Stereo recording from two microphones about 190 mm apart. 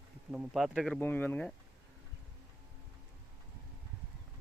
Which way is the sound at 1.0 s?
10° left (ahead or behind).